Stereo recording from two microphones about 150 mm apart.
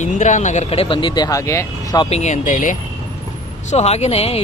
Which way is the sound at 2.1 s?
50° left (ahead or behind).